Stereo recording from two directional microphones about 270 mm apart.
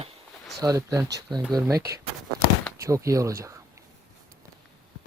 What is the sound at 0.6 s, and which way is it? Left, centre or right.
Speech, centre.